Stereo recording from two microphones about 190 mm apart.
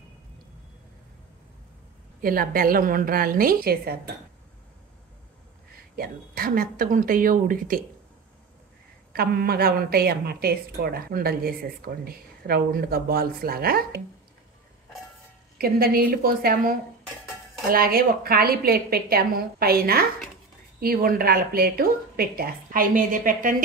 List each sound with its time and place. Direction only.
2.2 s a woman's voice: 50° right (ahead or behind)
5.9 s a woman's voice: 50° right (ahead or behind)
9.1 s a woman's voice: 55° right (ahead or behind)
15.5 s a woman's voice: 50° right (ahead or behind)